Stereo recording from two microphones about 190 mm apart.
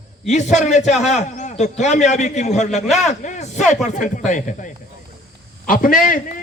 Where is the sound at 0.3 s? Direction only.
35° left (ahead or behind).